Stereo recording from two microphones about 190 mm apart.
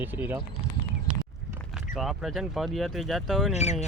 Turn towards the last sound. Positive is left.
turn(degrees=35)  # may be behind; listen again after turning